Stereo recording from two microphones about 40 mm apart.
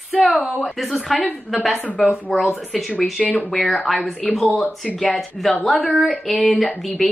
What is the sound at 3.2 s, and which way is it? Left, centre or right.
Speech, left.